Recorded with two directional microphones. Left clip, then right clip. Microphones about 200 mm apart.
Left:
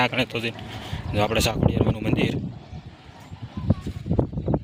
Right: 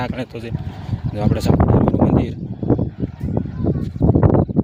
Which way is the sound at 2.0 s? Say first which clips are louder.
Right 5 dB; 10° right (ahead or behind).